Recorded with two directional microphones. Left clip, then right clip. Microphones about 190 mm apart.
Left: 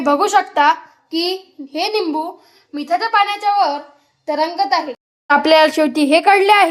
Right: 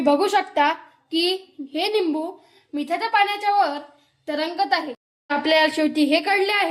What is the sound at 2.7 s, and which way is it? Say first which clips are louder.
Speech: left 6 dB; 10° left (ahead or behind).